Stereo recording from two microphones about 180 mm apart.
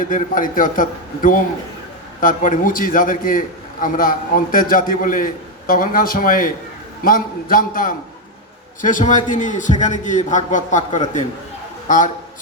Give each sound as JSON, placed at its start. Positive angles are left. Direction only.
{"t": 0.0, "sound": "a man's voice", "side_deg": 50}